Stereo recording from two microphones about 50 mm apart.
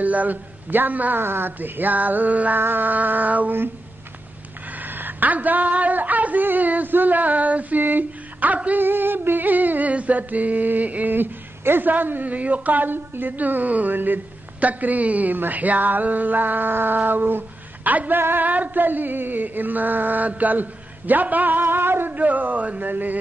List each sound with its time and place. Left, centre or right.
0.0 s music: right
1.2 s music: right
4.6 s speech: right
8.7 s music: right